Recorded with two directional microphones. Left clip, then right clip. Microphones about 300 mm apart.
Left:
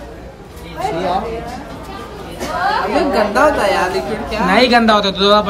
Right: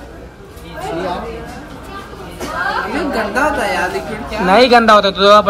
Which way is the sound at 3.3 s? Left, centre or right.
Centre.